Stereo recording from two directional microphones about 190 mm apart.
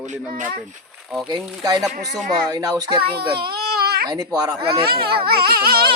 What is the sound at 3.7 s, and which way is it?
Baby cry, 55° right (ahead or behind).